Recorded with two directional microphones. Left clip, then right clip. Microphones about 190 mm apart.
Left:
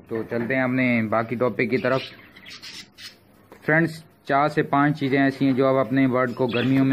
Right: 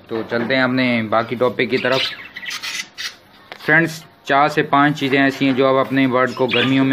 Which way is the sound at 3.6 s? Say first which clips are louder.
Right 6 dB; centre (ahead or behind).